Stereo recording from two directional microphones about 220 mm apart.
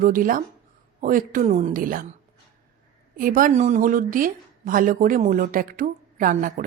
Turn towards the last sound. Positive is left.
turn(degrees=-40)  # may be behind; listen again after turning